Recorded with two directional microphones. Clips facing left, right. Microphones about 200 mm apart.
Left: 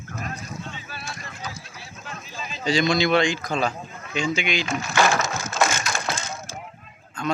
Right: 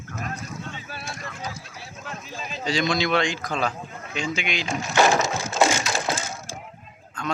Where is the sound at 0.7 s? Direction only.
50° right (ahead or behind).